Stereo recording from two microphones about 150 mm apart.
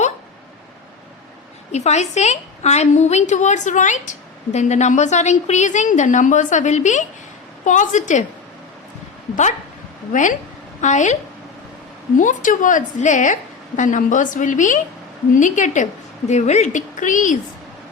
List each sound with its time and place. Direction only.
1.7 s a woman's voice: 50° left (ahead or behind)
9.3 s a woman's voice: 55° left (ahead or behind)